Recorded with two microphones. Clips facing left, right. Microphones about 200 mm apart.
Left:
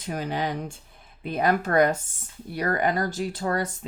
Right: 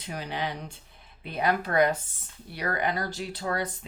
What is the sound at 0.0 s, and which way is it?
Speech, 45° left (ahead or behind).